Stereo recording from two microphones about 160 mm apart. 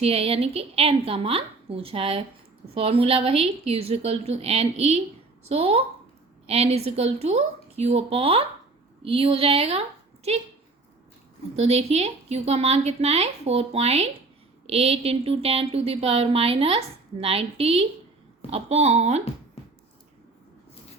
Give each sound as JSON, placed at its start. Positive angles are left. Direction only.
{"t": 0.0, "sound": "a woman's voice", "side_deg": -35}
{"t": 11.5, "sound": "a woman's voice", "side_deg": -40}